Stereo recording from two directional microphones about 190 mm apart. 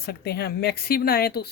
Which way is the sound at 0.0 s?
55° left (ahead or behind).